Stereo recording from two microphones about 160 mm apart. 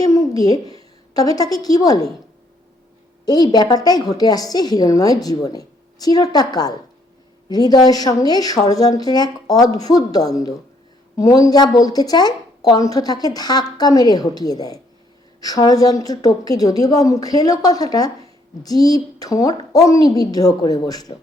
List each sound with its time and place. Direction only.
0.0 s a woman's voice: 25° left (ahead or behind)
3.2 s a woman's voice: 25° left (ahead or behind)